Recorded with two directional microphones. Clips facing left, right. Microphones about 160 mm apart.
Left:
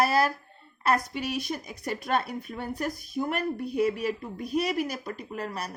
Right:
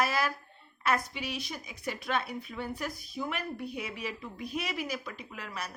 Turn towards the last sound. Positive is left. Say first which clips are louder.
# left 7 dB
turn(degrees=40)  # may be behind; listen again after turning